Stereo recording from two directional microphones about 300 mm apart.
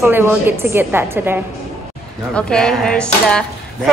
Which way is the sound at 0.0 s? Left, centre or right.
Centre.